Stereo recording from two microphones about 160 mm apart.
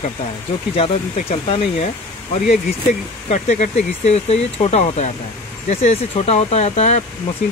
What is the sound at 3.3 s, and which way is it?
Speech, 50° left (ahead or behind).